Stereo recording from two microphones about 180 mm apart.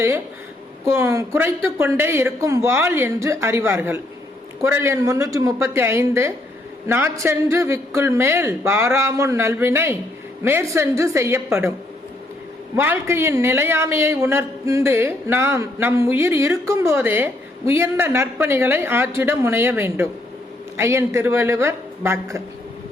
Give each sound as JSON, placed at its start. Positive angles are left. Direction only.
{"t": 0.9, "sound": "a man's voice", "side_deg": -15}
{"t": 12.7, "sound": "a man's voice", "side_deg": -10}